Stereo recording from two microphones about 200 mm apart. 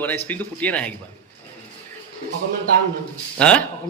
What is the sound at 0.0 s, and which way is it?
Speech, 10° left (ahead or behind).